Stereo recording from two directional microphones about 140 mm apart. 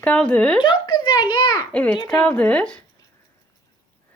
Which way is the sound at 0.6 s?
35° left (ahead or behind).